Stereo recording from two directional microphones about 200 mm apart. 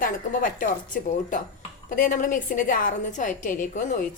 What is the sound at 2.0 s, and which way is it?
A woman's voice, 40° left (ahead or behind).